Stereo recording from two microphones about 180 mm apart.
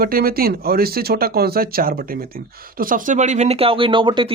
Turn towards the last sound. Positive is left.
turn(degrees=-30)  # may be behind; listen again after turning